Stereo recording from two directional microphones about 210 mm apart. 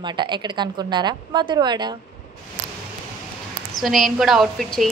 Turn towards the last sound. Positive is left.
turn(degrees=0)  # may be behind; listen again after turning